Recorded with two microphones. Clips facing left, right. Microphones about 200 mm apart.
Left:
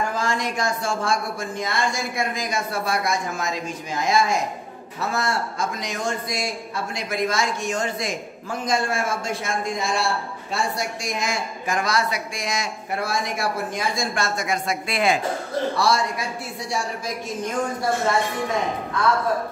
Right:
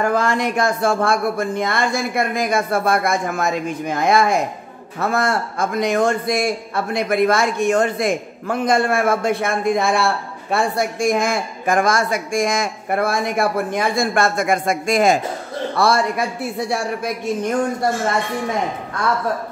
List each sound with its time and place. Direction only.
0.0 s a man's voice: 60° right (ahead or behind); by 15.1 s 45° right (ahead or behind)
15.7 s a man's voice: 55° right (ahead or behind)